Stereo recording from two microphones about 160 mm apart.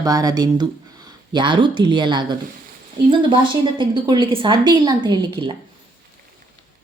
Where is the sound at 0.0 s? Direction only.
20° right (ahead or behind).